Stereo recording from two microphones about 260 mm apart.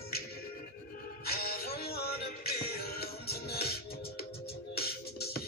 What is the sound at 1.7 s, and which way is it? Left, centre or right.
Music, left.